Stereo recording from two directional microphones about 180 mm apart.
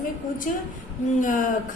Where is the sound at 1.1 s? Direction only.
45° left (ahead or behind).